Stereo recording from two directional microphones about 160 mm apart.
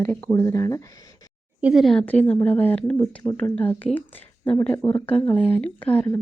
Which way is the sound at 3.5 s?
10° left (ahead or behind).